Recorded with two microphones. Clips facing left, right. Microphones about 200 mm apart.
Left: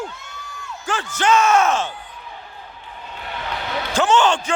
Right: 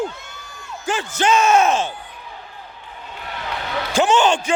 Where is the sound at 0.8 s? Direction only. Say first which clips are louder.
Right 1 dB; 15° right (ahead or behind).